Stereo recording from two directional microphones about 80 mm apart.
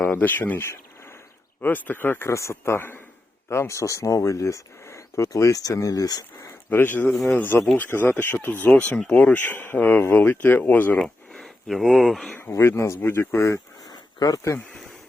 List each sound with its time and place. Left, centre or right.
0.0 s speech: left
2.3 s speech: left
6.7 s speech: left
7.1 s speech: centre
7.3 s speech: left
11.0 s speech: centre
12.4 s speech: left
13.9 s a sound: left